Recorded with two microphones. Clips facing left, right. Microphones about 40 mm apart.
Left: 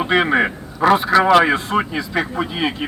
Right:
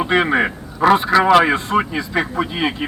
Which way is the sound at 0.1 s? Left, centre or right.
Centre.